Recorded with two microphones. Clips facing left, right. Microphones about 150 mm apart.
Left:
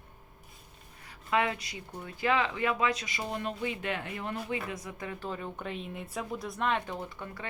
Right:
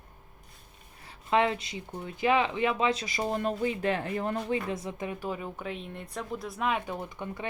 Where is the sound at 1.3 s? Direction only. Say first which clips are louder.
Right 4 dB; 25° right (ahead or behind).